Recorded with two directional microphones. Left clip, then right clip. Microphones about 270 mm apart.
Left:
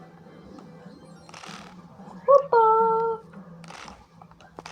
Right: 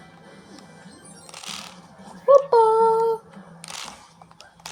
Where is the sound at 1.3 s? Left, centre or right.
Centre.